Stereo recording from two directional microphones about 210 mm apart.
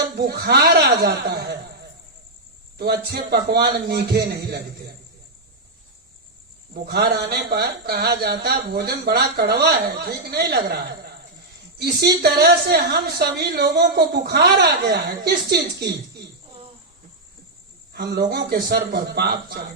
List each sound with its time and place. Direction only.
0.2 s a woman's voice: 50° right (ahead or behind)
2.7 s a woman's voice: 50° right (ahead or behind)
6.7 s a woman's voice: 50° right (ahead or behind)
11.8 s a woman's voice: 50° right (ahead or behind)
17.9 s a woman's voice: 50° right (ahead or behind)